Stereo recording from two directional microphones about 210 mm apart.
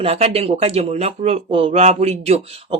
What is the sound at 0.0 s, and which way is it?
Speech, 30° right (ahead or behind).